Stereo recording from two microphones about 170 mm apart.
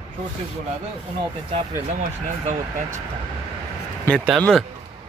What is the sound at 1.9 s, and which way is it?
Speech, 45° right (ahead or behind).